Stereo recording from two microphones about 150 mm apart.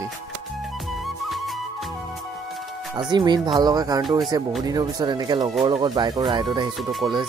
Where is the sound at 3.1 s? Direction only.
30° right (ahead or behind).